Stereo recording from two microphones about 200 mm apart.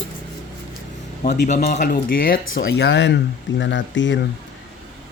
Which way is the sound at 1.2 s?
55° left (ahead or behind).